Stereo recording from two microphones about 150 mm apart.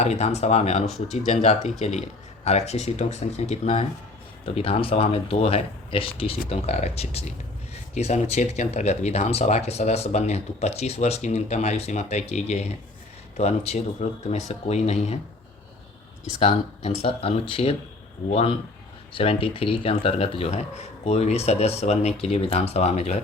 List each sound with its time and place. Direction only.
0.0 s speech: 50° left (ahead or behind)
16.4 s speech: 45° left (ahead or behind)
19.1 s speech: 40° left (ahead or behind)